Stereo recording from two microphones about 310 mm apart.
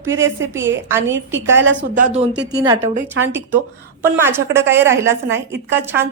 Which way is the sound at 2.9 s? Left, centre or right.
Right.